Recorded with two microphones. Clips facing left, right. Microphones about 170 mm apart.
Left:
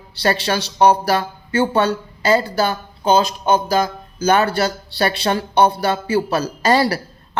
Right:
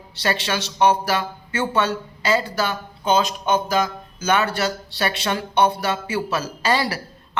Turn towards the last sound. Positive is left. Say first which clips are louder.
# left 6 dB
turn(degrees=40)  # may be behind; listen again after turning